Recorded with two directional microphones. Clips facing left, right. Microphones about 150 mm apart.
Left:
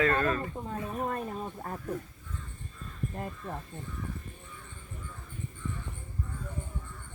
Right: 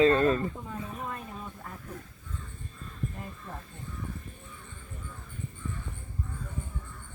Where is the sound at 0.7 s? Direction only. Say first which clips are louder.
Left 4 dB; 45° left (ahead or behind).